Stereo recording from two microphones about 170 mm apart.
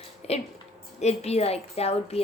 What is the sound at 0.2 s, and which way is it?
A woman's voice, 40° left (ahead or behind).